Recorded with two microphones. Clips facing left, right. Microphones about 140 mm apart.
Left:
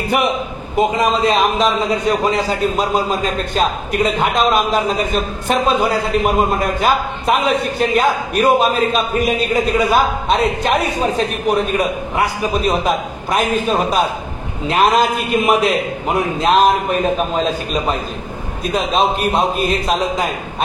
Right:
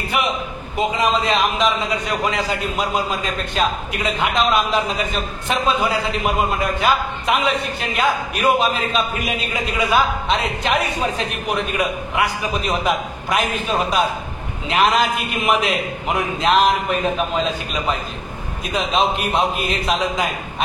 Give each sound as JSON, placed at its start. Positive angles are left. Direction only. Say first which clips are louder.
{"t": 0.7, "sound": "a man's voice", "louder": "left 4 dB", "side_deg": 40}